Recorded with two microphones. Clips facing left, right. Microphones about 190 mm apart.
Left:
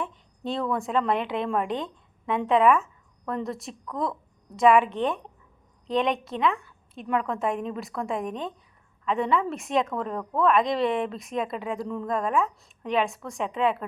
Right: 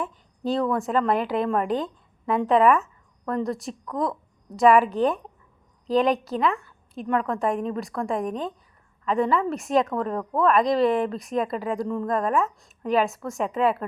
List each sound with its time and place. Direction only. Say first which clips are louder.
0.0 s a woman's voice: right 3 dB; centre (ahead or behind)